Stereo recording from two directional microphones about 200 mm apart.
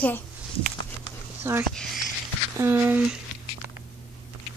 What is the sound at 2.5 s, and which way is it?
Speech, 15° right (ahead or behind).